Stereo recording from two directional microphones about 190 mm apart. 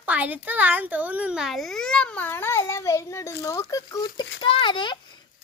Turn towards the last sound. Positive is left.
turn(degrees=25)  # may be behind; listen again after turning